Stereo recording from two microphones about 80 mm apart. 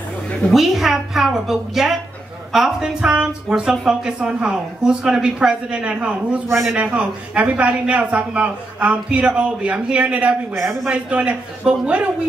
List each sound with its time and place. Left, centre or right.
0.5 s a woman's voice: centre